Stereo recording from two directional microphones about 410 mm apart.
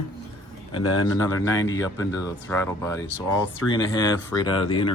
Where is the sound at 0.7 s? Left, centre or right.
Centre.